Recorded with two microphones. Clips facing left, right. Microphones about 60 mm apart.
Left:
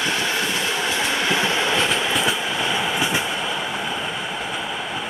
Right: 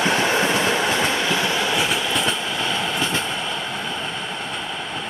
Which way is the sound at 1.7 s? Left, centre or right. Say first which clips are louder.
Left 1 dB; centre.